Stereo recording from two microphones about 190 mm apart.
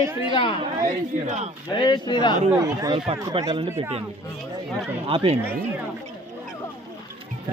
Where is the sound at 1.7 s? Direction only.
25° left (ahead or behind).